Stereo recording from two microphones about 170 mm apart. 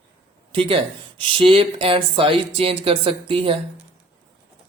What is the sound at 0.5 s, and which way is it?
Speech, 30° right (ahead or behind).